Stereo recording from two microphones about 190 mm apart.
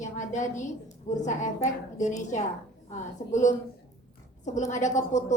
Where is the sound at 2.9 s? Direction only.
40° left (ahead or behind).